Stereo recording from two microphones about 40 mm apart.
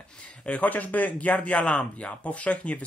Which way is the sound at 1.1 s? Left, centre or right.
Left.